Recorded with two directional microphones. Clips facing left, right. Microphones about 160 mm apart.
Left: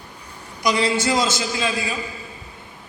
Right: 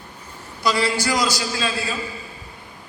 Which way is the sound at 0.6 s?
20° left (ahead or behind).